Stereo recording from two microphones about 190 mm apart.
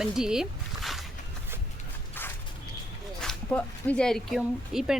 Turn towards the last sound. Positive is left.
turn(degrees=0)  # may be behind; listen again after turning